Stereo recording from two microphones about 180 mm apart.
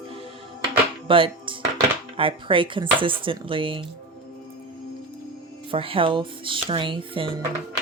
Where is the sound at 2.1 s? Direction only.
30° right (ahead or behind).